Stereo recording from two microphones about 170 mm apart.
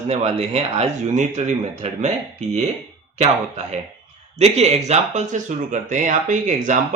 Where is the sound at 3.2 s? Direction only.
40° right (ahead or behind).